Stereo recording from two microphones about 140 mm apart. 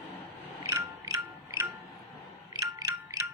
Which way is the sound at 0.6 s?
20° right (ahead or behind).